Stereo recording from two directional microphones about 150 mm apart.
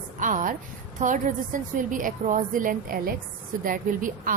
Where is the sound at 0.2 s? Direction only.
60° right (ahead or behind).